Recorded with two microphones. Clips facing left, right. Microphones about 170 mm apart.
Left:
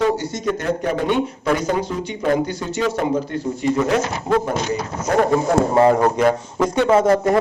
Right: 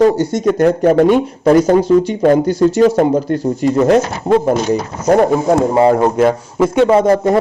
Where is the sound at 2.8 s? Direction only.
40° right (ahead or behind).